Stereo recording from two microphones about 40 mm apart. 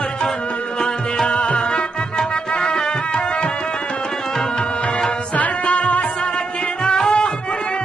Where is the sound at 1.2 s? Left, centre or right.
Left.